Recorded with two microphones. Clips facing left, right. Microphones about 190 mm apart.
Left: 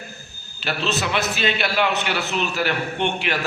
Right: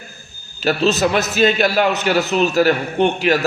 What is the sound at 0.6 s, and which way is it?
A man's voice, 40° right (ahead or behind).